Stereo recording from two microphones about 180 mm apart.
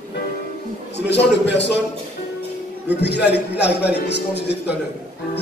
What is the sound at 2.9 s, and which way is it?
Speech, 70° left (ahead or behind).